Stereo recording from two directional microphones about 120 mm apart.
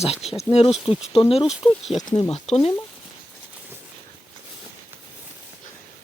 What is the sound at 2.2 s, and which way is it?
Speech, 60° left (ahead or behind).